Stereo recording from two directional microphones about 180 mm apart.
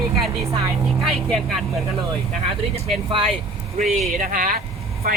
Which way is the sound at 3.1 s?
30° right (ahead or behind).